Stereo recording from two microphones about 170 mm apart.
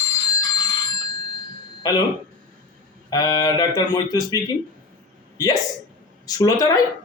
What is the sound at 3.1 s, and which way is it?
Speech, 20° left (ahead or behind).